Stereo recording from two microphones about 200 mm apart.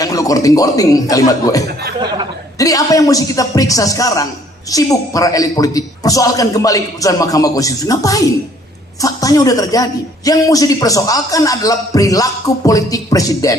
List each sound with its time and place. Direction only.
0.0 s a man's voice: 15° left (ahead or behind)